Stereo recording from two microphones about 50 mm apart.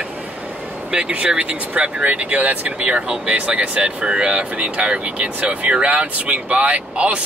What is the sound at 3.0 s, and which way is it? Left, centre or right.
Speech, centre.